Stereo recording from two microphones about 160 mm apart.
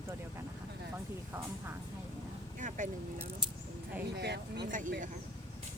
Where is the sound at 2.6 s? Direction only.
55° right (ahead or behind).